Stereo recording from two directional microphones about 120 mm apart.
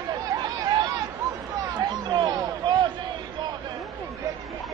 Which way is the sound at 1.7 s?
40° right (ahead or behind).